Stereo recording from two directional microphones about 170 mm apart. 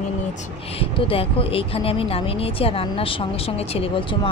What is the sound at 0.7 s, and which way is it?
Speech, 35° left (ahead or behind).